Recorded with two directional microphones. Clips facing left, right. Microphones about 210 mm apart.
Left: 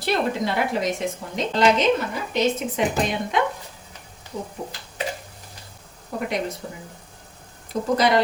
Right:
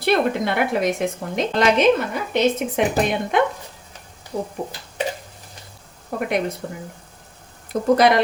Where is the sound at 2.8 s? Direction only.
60° right (ahead or behind).